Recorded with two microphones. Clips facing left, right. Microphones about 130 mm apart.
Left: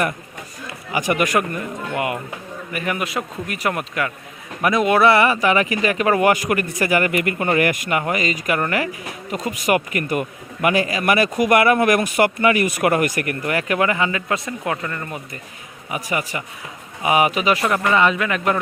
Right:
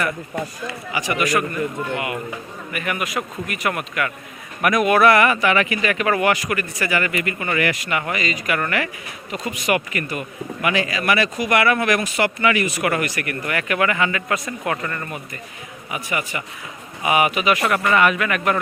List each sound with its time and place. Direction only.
0.9 s speech: 50° left (ahead or behind)
2.7 s speech: 30° left (ahead or behind)
13.4 s speech: 35° left (ahead or behind); by 15.0 s 15° left (ahead or behind)
15.9 s speech: 40° left (ahead or behind)